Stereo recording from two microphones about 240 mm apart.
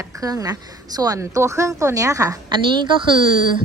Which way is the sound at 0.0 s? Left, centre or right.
Centre.